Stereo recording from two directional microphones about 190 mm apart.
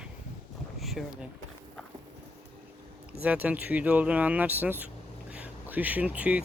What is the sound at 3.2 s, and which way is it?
Speech, 10° right (ahead or behind).